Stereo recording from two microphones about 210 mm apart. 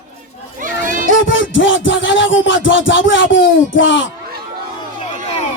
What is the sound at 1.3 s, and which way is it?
Music, 65° left (ahead or behind).